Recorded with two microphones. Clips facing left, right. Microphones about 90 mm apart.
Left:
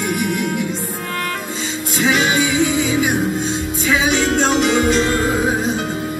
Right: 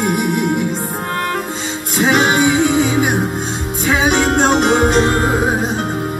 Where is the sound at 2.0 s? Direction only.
50° right (ahead or behind).